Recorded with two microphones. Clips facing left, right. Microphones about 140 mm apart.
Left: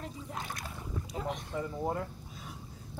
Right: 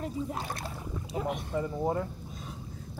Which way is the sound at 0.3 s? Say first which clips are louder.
Right 5 dB; 35° right (ahead or behind).